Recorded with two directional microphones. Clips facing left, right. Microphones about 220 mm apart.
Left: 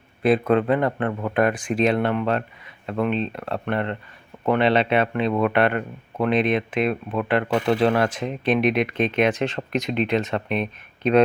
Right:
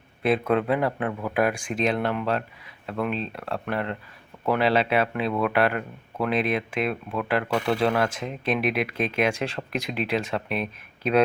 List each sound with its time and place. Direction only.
0.2 s speech: centre (ahead or behind)
7.4 s speech: 20° left (ahead or behind)
7.7 s speech: centre (ahead or behind)